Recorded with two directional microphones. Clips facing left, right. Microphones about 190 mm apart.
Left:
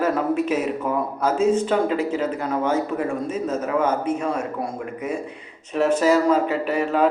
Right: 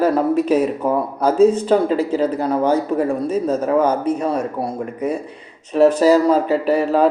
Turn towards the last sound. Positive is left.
turn(degrees=-35)  # may be behind; listen again after turning